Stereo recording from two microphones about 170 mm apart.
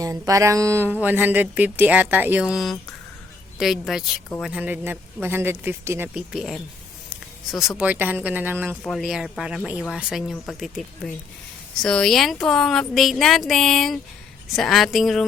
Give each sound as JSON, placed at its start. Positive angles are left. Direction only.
{"t": 0.0, "sound": "speech", "side_deg": -20}
{"t": 8.8, "sound": "speech", "side_deg": 0}